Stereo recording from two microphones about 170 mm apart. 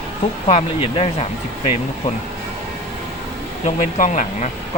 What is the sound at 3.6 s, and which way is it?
Speech, 45° left (ahead or behind).